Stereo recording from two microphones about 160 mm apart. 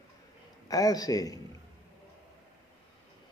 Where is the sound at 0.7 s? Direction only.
20° left (ahead or behind).